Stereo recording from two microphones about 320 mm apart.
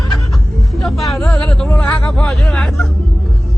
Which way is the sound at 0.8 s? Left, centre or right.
Centre.